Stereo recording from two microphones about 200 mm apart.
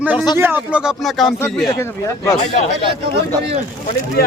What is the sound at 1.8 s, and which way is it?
Speech, 15° left (ahead or behind).